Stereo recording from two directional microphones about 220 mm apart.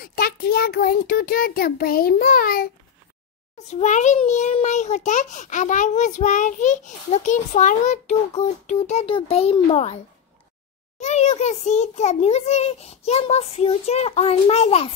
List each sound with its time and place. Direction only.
0.0 s a child's voice: 45° left (ahead or behind)
3.5 s a child's voice: 30° left (ahead or behind)
11.0 s a child's voice: 30° left (ahead or behind)